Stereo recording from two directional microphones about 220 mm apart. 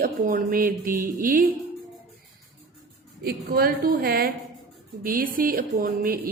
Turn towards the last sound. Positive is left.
turn(degrees=-40)  # may be behind; listen again after turning